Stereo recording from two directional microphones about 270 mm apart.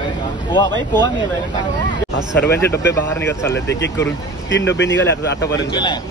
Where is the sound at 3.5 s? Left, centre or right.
Left.